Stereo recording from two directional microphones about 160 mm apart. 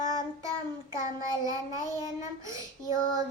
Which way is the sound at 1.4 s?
20° right (ahead or behind).